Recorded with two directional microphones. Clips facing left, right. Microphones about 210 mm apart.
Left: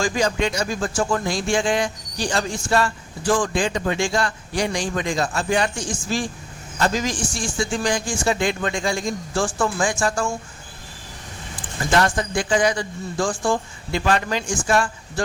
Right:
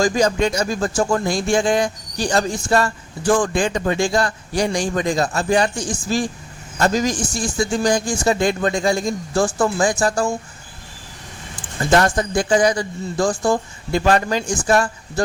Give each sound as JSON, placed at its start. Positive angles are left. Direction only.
{"t": 0.0, "sound": "speech", "side_deg": -40}
{"t": 11.9, "sound": "speech", "side_deg": -40}